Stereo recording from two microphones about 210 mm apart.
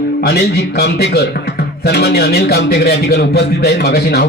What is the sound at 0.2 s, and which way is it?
Speech, 50° left (ahead or behind).